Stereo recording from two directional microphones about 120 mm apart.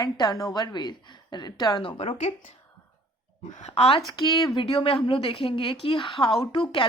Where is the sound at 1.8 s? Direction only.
50° left (ahead or behind).